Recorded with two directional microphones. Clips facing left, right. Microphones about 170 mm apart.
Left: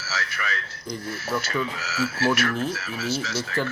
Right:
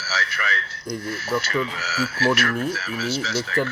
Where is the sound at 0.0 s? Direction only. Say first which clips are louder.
Right 3 dB; 70° right (ahead or behind).